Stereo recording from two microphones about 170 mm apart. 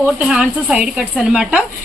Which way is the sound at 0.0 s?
5° right (ahead or behind).